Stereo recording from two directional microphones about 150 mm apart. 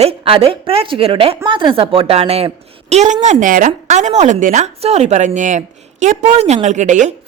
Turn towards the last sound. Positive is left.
turn(degrees=-55)  # may be behind; listen again after turning